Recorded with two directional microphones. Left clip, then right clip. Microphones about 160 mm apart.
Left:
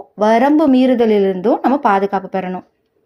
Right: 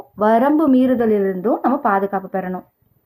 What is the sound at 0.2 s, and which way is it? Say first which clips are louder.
A woman's voice: left 3 dB; 5° left (ahead or behind).